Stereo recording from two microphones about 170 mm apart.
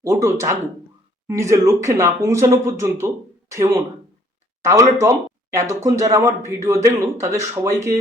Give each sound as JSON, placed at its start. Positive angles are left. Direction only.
{"t": 0.0, "sound": "speech", "side_deg": -20}